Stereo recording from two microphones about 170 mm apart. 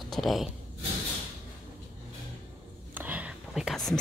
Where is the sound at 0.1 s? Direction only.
Centre (ahead or behind).